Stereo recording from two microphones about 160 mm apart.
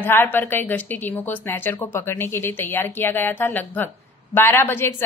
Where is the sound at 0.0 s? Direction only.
15° left (ahead or behind).